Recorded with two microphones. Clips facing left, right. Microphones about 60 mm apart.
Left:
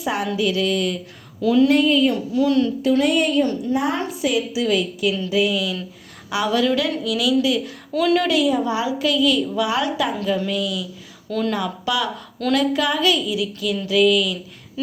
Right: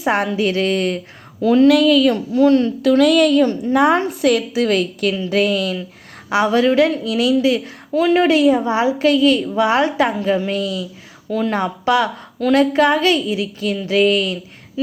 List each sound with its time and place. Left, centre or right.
0.0 s a woman's voice: right
1.6 s a woman's voice: right
2.3 s a woman's voice: right
3.0 s a woman's voice: right
3.8 s a woman's voice: right
6.3 s a woman's voice: right
11.3 s speech: centre
11.5 s a woman's voice: right